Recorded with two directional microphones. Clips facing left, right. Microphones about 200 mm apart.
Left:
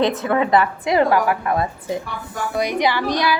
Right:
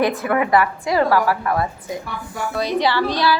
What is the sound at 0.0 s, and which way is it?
A woman's voice, 20° left (ahead or behind).